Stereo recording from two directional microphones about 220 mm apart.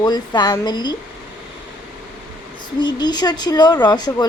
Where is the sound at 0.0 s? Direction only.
20° left (ahead or behind).